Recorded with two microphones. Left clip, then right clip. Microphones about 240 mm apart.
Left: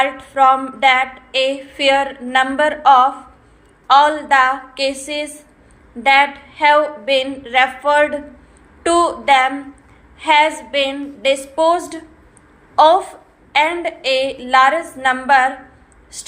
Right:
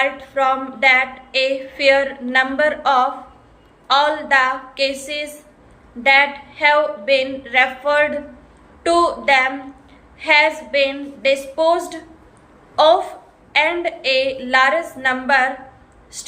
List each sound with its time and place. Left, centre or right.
0.0 s a woman's voice: centre